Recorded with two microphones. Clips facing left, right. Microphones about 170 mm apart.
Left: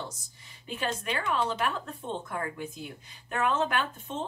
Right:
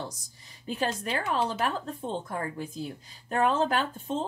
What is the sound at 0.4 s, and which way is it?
A woman's voice, 35° right (ahead or behind).